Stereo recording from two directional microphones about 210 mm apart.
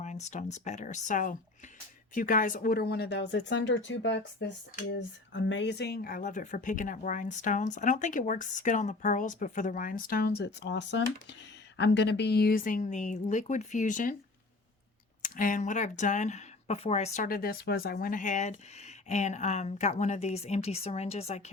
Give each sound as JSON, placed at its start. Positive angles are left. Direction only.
{"t": 0.0, "sound": "speech", "side_deg": 35}
{"t": 15.2, "sound": "speech", "side_deg": 40}